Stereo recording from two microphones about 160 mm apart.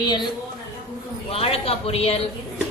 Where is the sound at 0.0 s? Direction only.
25° left (ahead or behind).